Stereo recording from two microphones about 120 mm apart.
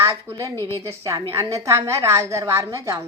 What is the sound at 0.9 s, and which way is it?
A woman's voice, 25° right (ahead or behind).